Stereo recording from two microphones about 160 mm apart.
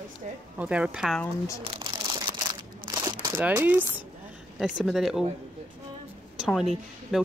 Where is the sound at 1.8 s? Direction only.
25° right (ahead or behind).